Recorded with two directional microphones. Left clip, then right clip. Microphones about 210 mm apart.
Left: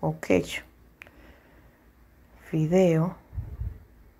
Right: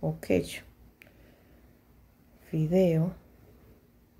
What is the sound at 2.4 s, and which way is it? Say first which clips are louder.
Speech: left 3 dB; 10° right (ahead or behind).